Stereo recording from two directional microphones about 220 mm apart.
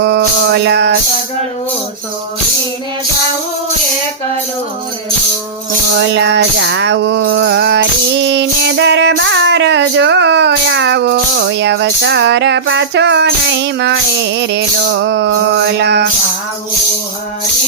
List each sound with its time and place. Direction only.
0.0 s music: 50° right (ahead or behind)
6.1 s music: 50° right (ahead or behind)